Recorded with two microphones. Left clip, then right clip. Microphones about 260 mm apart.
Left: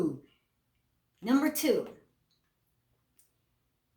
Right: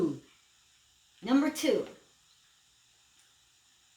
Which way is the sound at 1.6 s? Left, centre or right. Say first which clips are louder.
Left 1 dB; left.